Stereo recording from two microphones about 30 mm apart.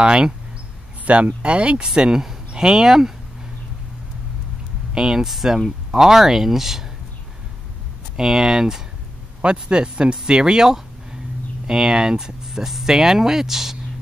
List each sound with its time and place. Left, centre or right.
0.0 s a man's voice: right
1.0 s speech: right
2.0 s speech: right
4.9 s speech: centre
8.2 s speech: centre
9.4 s a man's voice: right
12.4 s speech: centre